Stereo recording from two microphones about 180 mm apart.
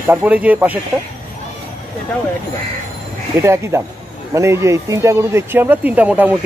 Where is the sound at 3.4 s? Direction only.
15° right (ahead or behind).